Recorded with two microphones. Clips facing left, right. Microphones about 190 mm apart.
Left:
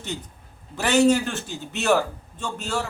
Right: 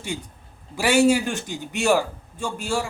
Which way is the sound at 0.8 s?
10° right (ahead or behind).